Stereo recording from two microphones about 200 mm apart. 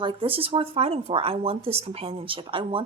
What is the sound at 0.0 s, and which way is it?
A woman's voice, 25° right (ahead or behind).